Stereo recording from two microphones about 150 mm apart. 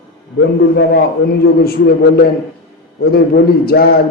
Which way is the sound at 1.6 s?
90° left.